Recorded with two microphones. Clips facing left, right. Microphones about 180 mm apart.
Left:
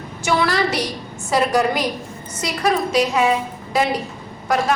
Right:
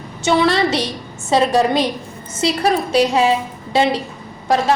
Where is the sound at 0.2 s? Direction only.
25° right (ahead or behind).